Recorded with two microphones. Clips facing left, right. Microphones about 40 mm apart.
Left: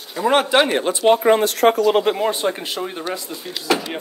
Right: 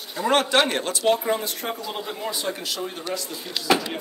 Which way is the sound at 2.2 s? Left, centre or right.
Left.